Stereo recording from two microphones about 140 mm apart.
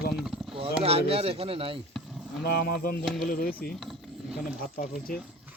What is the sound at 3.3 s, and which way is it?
Speech, 90° left.